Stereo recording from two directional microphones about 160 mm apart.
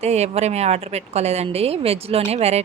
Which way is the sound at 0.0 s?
45° right (ahead or behind).